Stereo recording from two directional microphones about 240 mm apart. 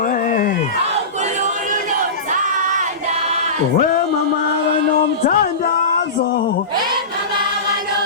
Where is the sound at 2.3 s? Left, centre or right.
Right.